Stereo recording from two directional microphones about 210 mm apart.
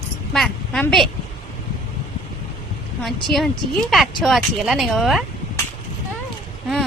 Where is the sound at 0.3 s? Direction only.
Centre (ahead or behind).